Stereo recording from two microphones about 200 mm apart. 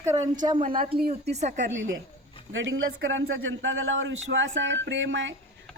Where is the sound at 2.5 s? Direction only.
70° right (ahead or behind).